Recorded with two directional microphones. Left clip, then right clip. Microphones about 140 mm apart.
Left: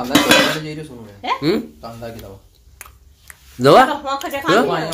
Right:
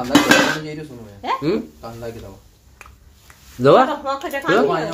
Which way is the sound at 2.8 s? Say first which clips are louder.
Left 2 dB; 20° left (ahead or behind).